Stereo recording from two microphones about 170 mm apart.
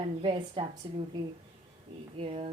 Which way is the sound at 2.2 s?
35° right (ahead or behind).